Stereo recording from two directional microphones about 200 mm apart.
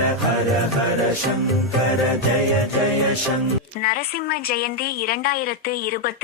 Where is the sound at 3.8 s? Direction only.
50° left (ahead or behind).